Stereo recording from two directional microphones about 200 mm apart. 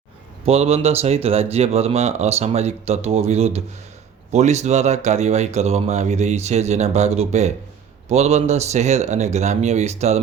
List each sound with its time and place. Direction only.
0.4 s speech: 30° right (ahead or behind)